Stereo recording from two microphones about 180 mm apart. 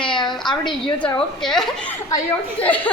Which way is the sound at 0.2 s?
Centre (ahead or behind).